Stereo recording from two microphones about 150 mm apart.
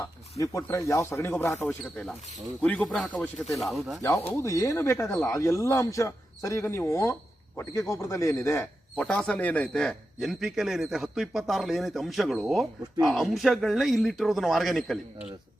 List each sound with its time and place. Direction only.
0.3 s speech: 20° left (ahead or behind)
1.8 s speech: centre (ahead or behind)
4.3 s speech: 20° left (ahead or behind)
9.0 s speech: 5° left (ahead or behind)